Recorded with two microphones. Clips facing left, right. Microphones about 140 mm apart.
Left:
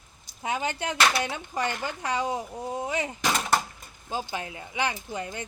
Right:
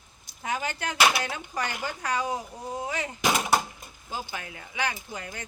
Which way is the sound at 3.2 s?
10° right (ahead or behind).